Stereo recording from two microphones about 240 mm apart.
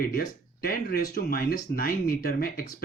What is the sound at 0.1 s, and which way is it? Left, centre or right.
Speech, left.